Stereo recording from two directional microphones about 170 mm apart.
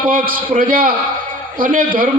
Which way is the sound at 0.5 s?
55° right (ahead or behind).